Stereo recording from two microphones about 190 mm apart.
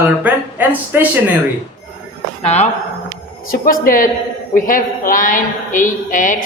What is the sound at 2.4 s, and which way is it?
Speech, 35° left (ahead or behind).